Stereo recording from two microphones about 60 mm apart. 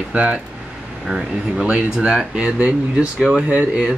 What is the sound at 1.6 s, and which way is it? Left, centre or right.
Speech, centre.